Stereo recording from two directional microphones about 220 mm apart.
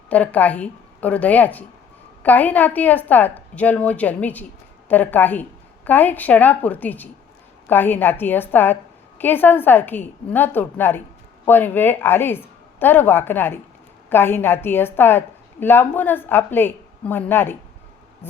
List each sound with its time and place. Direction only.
0.1 s a woman's voice: 5° left (ahead or behind)